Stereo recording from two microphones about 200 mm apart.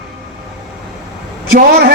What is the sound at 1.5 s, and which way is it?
Speech, 50° right (ahead or behind).